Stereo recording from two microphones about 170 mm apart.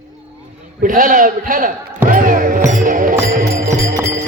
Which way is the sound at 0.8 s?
55° right (ahead or behind).